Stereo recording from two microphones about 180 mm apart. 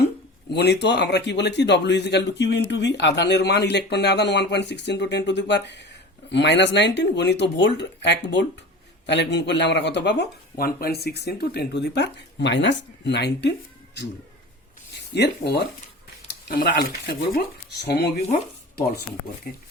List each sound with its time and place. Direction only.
0.5 s a man's voice: 70° left (ahead or behind)
10.6 s a man's voice: 55° left (ahead or behind)
15.1 s a man's voice: 65° left (ahead or behind)